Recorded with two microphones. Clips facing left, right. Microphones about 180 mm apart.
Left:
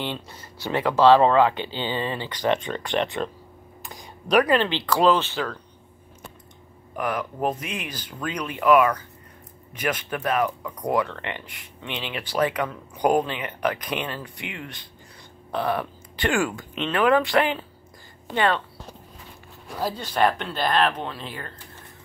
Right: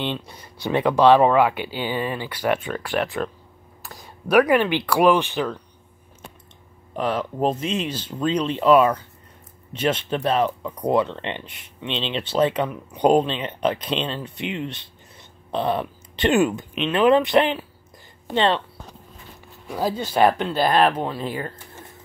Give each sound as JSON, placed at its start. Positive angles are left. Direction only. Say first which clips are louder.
{"t": 0.0, "sound": "speech", "louder": "right 3 dB", "side_deg": -20}
{"t": 7.0, "sound": "speech", "louder": "right 3 dB", "side_deg": -25}
{"t": 19.8, "sound": "speech", "louder": "right 4 dB", "side_deg": 0}